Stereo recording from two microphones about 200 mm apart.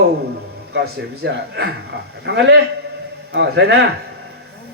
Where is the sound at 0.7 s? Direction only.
55° right (ahead or behind).